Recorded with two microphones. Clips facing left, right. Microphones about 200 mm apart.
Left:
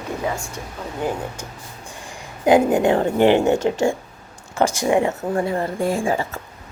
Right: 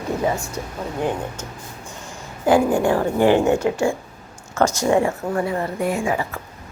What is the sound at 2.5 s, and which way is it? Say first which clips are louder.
A woman's voice: left 1 dB; 20° left (ahead or behind).